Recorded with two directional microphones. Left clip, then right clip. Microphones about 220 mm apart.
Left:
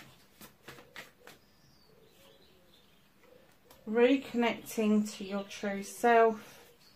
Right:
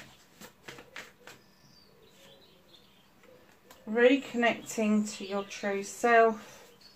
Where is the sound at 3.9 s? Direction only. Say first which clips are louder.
Right 3 dB; 30° left (ahead or behind).